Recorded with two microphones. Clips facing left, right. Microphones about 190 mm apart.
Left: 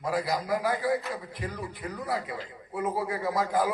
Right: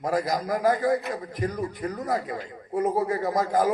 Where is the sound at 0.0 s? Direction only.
45° right (ahead or behind).